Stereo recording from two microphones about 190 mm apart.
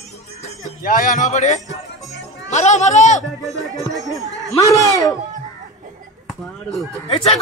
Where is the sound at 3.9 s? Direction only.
20° right (ahead or behind).